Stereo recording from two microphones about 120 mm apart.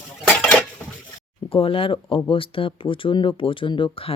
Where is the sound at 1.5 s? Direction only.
50° left (ahead or behind).